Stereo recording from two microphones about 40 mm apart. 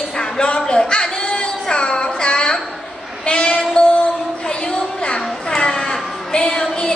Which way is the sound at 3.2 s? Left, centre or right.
Left.